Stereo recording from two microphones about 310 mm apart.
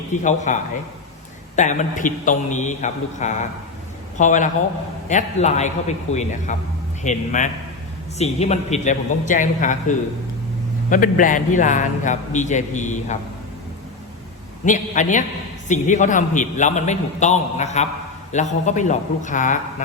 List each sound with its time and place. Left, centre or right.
0.1 s a man's voice: left
14.6 s a man's voice: left